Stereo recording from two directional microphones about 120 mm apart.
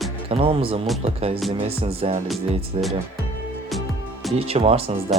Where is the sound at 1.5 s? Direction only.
50° right (ahead or behind).